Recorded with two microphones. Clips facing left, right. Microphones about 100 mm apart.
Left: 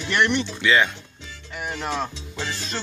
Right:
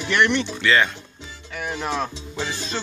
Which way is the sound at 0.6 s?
15° left (ahead or behind).